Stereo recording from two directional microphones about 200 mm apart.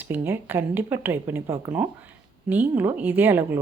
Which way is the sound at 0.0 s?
10° right (ahead or behind).